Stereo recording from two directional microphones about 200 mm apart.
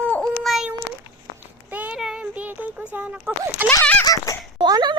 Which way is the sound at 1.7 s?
5° right (ahead or behind).